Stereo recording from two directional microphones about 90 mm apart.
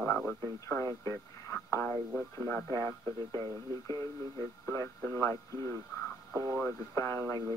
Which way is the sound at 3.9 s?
35° left (ahead or behind).